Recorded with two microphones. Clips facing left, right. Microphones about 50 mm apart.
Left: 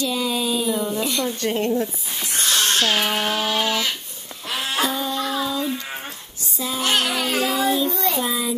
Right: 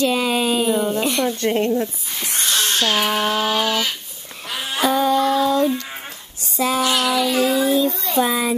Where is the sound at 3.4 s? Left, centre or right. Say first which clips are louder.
Right 2 dB; centre.